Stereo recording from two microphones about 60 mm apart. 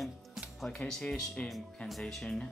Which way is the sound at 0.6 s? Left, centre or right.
Centre.